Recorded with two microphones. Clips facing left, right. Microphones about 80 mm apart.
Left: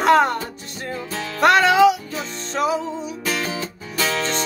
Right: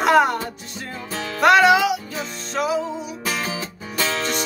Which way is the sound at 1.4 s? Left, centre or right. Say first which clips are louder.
Left 1 dB; centre.